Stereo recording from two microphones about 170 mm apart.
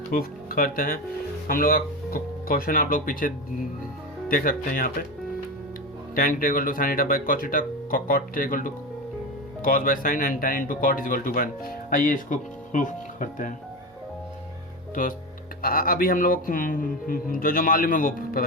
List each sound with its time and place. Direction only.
0.1 s speech: 60° left (ahead or behind)
6.1 s speech: 55° left (ahead or behind)
15.0 s speech: 50° left (ahead or behind)